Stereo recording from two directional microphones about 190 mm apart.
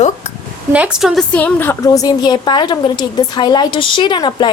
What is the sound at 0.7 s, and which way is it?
A woman's voice, 5° right (ahead or behind).